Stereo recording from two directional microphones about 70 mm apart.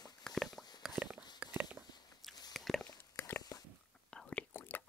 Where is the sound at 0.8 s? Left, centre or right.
Centre.